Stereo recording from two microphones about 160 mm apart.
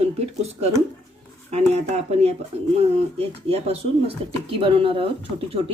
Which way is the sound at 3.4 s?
40° right (ahead or behind).